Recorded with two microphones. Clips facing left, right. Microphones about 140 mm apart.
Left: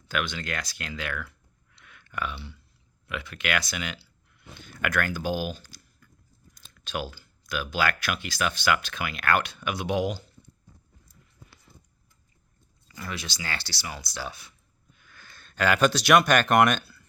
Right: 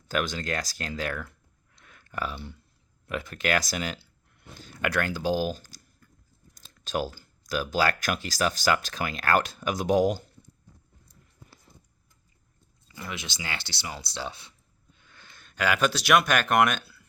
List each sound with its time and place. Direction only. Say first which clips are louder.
0.1 s speech: right 2 dB; 40° right (ahead or behind)
1.8 s a sound: even; 35° right (ahead or behind)
3.1 s speech: right 3 dB; 40° right (ahead or behind)
12.9 s speech: left 1 dB; 20° right (ahead or behind); by 17.1 s 5° right (ahead or behind)